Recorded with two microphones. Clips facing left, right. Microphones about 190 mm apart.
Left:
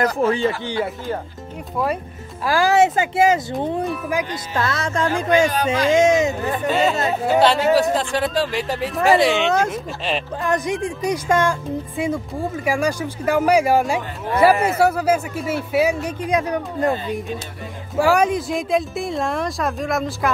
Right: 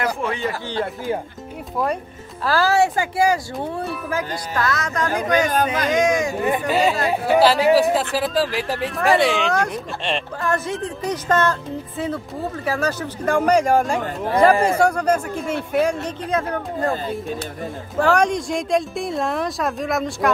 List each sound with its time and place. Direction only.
0.0 s speech: 35° left (ahead or behind)
2.4 s speech: 15° left (ahead or behind)
6.7 s speech: centre (ahead or behind)
10.4 s speech: 15° left (ahead or behind)
17.9 s speech: 10° left (ahead or behind)